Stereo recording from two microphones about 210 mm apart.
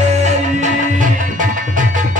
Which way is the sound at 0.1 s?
35° right (ahead or behind).